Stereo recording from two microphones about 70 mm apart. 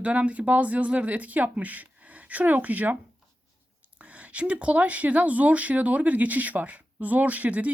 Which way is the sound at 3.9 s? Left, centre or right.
Centre.